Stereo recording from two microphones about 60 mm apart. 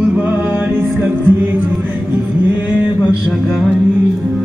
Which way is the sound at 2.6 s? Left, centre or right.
Right.